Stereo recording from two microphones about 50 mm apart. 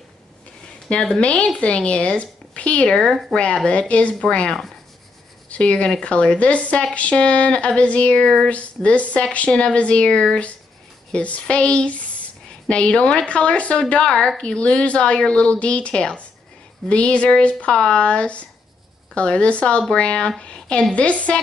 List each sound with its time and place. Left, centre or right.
0.8 s a woman's voice: centre
3.3 s speech: centre
3.6 s a woman's voice: left